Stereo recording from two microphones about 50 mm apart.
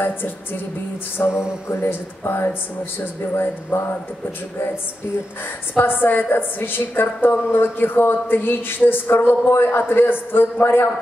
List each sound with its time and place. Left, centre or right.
0.0 s speech: left
1.2 s a sound: left
1.7 s speech: left
5.8 s speech: left